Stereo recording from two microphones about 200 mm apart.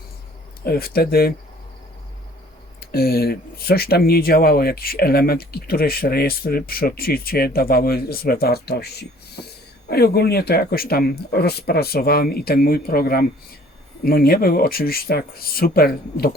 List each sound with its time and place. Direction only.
0.6 s speech: 50° left (ahead or behind)
2.8 s speech: 50° left (ahead or behind)